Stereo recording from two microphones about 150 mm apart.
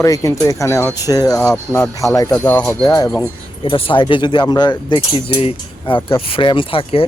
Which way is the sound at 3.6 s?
35° left (ahead or behind).